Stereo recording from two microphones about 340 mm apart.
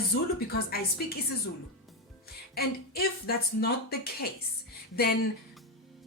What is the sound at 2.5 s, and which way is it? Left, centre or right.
Speech, left.